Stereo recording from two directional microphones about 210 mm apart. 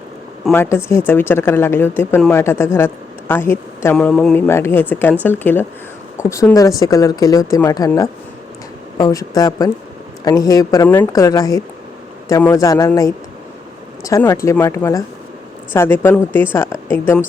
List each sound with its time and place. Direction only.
0.5 s a woman's voice: 10° left (ahead or behind)